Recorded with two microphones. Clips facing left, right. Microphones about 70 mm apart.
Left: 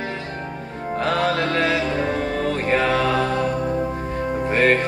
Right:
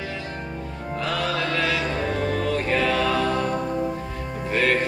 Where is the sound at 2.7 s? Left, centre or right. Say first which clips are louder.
Left 4 dB; left.